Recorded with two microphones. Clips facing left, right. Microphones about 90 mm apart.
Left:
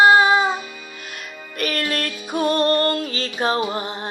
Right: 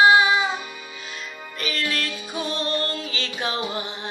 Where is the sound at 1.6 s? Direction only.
50° left (ahead or behind).